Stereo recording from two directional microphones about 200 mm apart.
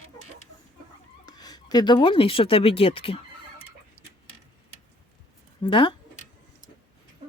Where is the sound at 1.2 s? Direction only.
20° left (ahead or behind).